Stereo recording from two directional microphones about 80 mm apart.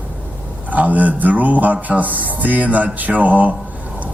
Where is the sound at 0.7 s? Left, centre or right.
Centre.